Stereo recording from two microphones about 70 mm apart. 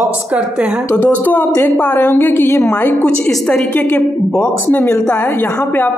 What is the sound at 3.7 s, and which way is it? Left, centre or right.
A woman's voice, left.